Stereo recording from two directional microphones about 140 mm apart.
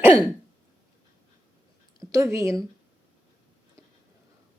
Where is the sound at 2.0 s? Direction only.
20° right (ahead or behind).